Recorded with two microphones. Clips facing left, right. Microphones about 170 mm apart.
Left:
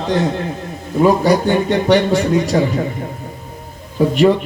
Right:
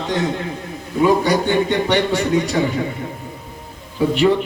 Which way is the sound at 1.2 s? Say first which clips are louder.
Left 3 dB; 35° left (ahead or behind).